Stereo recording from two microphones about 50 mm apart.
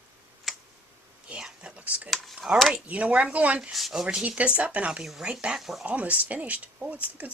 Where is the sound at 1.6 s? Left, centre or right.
Right.